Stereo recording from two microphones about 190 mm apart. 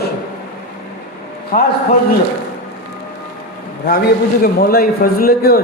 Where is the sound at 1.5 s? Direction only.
45° left (ahead or behind).